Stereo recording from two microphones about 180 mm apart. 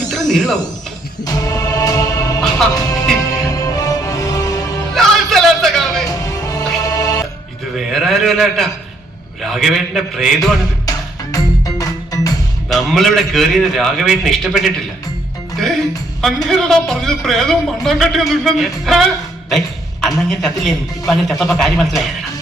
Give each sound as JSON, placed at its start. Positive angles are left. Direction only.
{"t": 0.1, "sound": "a sound", "side_deg": 0}
{"t": 1.2, "sound": "music", "side_deg": 20}
{"t": 4.9, "sound": "a sound", "side_deg": 0}
{"t": 6.1, "sound": "music", "side_deg": 20}
{"t": 7.8, "sound": "a sound", "side_deg": 0}
{"t": 9.4, "sound": "a man's voice", "side_deg": 0}
{"t": 10.8, "sound": "music", "side_deg": 20}
{"t": 12.6, "sound": "a man's voice", "side_deg": 0}
{"t": 16.5, "sound": "a man's voice", "side_deg": 0}